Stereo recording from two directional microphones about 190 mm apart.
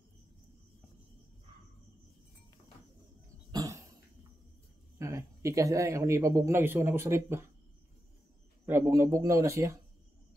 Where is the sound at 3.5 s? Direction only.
20° right (ahead or behind).